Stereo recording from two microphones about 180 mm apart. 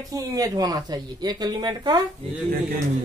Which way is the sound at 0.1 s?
20° right (ahead or behind).